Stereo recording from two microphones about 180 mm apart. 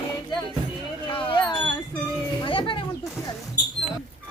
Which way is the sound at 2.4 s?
30° left (ahead or behind).